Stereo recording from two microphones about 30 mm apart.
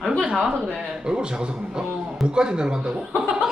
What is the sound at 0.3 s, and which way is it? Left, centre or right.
Speech, centre.